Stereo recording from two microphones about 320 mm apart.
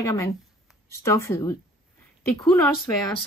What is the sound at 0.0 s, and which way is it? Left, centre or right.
Speech, centre.